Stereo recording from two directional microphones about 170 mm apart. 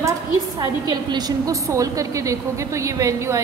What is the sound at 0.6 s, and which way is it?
A woman's voice, 25° right (ahead or behind).